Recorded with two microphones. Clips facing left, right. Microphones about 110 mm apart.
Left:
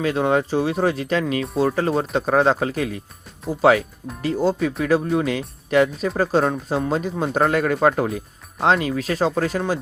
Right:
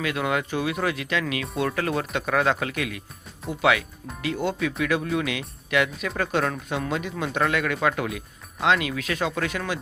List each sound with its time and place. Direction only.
0.0 s speech: 35° left (ahead or behind)